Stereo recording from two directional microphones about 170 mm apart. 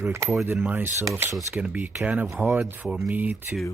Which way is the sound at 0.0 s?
15° right (ahead or behind).